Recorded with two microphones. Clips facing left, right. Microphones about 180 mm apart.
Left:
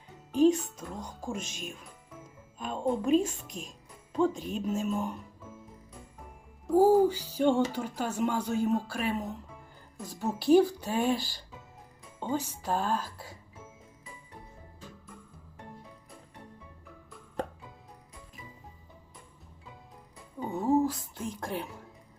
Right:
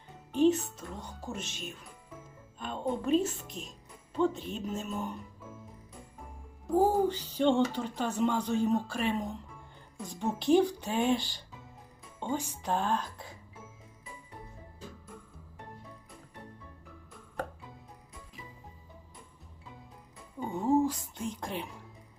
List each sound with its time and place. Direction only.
0.6 s speech: 10° left (ahead or behind)
4.7 s speech: 45° left (ahead or behind)
6.7 s speech: 5° left (ahead or behind)
20.4 s a sound: 5° left (ahead or behind)